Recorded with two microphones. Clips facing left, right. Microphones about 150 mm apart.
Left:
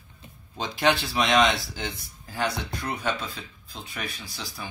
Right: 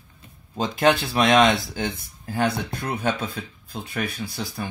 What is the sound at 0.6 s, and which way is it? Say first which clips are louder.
Speech: right 4 dB; 50° right (ahead or behind).